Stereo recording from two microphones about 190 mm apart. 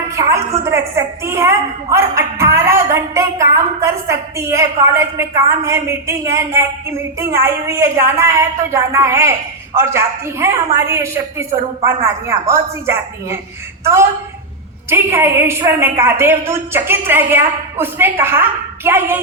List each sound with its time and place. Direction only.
0.1 s a woman's voice: 15° right (ahead or behind)
14.8 s a woman's voice: 15° right (ahead or behind)